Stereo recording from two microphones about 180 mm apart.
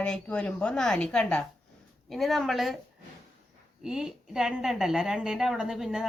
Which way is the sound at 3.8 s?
5° right (ahead or behind).